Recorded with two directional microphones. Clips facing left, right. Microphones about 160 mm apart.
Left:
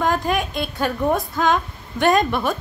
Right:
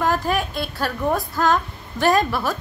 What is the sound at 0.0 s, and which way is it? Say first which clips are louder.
A woman's voice: left 1 dB; 5° right (ahead or behind).